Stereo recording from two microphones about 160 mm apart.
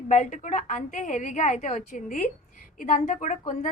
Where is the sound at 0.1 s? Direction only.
50° left (ahead or behind).